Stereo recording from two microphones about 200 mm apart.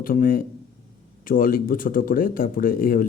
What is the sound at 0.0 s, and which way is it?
A man's voice, 45° left (ahead or behind).